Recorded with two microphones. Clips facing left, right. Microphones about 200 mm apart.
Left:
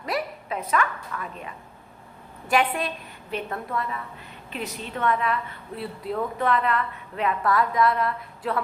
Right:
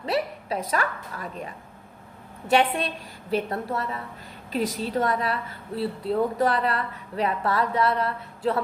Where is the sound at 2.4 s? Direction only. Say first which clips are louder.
Right 2 dB; 25° right (ahead or behind).